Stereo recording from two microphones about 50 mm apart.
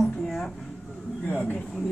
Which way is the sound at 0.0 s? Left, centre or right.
Centre.